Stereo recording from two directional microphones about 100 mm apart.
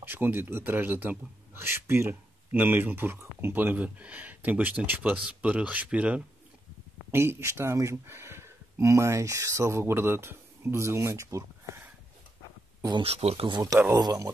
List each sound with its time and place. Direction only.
0.0 s a man's voice: 20° right (ahead or behind)
7.1 s speech: 25° right (ahead or behind)
13.0 s speech: 90° right
13.5 s speech: 40° right (ahead or behind)